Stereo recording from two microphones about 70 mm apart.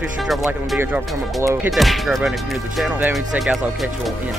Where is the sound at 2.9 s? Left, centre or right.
Right.